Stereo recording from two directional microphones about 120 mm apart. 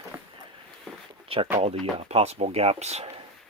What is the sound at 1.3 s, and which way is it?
Speech, 50° right (ahead or behind).